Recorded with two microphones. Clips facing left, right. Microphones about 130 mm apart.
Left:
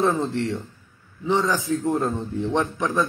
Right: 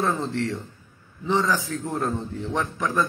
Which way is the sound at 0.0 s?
20° left (ahead or behind).